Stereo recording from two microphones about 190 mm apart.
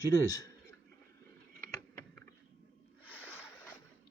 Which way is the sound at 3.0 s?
10° left (ahead or behind).